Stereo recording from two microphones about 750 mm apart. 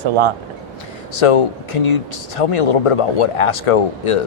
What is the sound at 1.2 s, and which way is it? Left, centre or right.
Speech, left.